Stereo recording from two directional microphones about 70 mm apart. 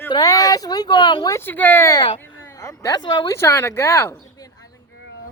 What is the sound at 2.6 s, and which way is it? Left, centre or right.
Speech, left.